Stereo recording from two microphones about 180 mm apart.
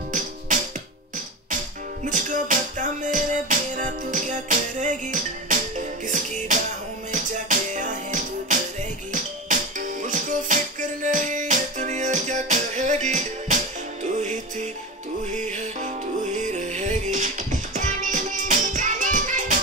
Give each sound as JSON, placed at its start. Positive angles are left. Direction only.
{"t": 0.5, "sound": "music", "side_deg": -45}
{"t": 2.0, "sound": "music", "side_deg": -45}